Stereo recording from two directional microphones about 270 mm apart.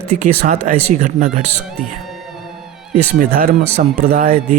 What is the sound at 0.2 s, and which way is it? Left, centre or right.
Speech, right.